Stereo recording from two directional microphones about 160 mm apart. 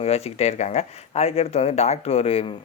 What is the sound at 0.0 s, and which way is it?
Speech, 40° left (ahead or behind).